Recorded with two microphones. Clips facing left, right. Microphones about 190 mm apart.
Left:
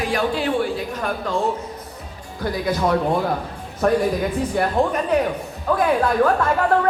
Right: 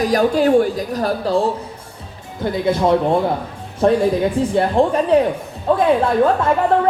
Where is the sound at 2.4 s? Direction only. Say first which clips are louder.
Right 4 dB; 25° right (ahead or behind).